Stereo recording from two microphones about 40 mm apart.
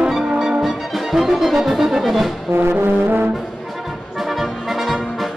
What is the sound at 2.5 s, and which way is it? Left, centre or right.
Brass instrument, right.